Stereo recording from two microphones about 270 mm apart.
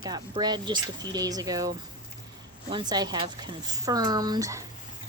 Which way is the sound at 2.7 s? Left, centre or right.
Centre.